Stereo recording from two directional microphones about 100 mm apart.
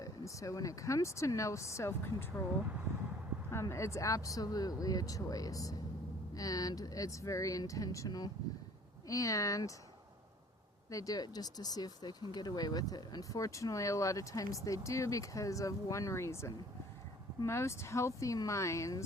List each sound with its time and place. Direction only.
0.0 s speech: 35° left (ahead or behind)
3.5 s speech: 30° left (ahead or behind)
10.9 s speech: 35° left (ahead or behind)